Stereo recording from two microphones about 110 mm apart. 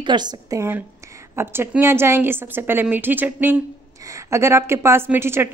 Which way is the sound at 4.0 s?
30° right (ahead or behind).